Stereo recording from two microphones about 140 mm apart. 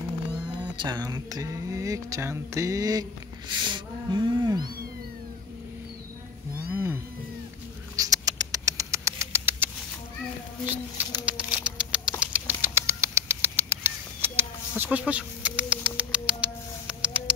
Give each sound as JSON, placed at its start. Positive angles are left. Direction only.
{"t": 0.7, "sound": "speech", "side_deg": -30}
{"t": 6.7, "sound": "cat", "side_deg": -15}
{"t": 7.9, "sound": "rodents", "side_deg": -25}
{"t": 11.2, "sound": "bird", "side_deg": -10}